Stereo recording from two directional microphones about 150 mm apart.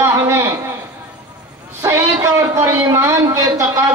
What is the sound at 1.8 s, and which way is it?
A man's voice, 20° right (ahead or behind).